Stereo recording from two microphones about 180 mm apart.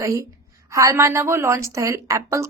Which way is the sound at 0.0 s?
15° right (ahead or behind).